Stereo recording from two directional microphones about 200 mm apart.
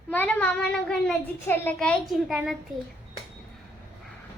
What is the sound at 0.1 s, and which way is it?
A woman's voice, 10° left (ahead or behind).